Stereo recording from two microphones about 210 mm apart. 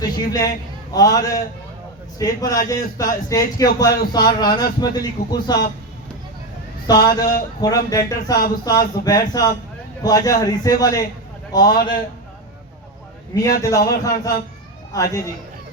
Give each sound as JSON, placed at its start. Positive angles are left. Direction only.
{"t": 0.0, "sound": "a man's voice", "side_deg": 15}
{"t": 6.8, "sound": "a man's voice", "side_deg": 20}
{"t": 13.3, "sound": "a man's voice", "side_deg": 20}